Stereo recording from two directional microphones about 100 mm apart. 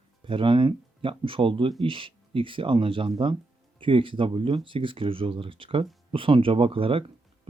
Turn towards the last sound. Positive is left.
turn(degrees=-70)  # may be behind; listen again after turning